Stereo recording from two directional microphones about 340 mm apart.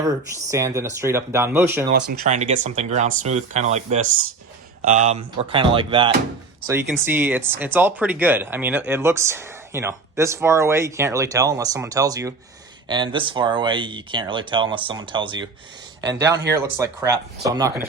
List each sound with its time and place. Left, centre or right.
0.0 s speech: centre
1.9 s speech: right
16.5 s speech: centre